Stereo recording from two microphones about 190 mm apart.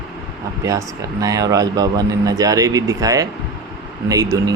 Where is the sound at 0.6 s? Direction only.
20° right (ahead or behind).